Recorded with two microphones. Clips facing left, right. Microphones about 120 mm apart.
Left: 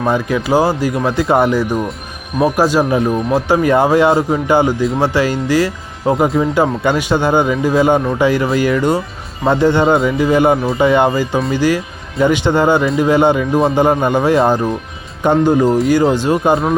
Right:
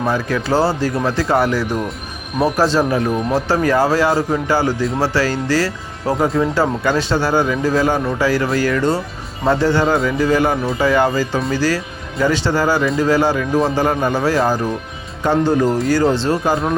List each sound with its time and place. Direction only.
0.0 s speech: 20° left (ahead or behind)